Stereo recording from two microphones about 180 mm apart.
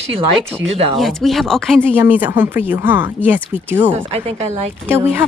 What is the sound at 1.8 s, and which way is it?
Speech, 10° right (ahead or behind).